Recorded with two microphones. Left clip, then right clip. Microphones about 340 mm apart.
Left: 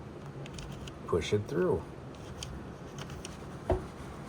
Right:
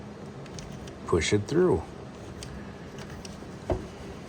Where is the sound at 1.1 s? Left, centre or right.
Right.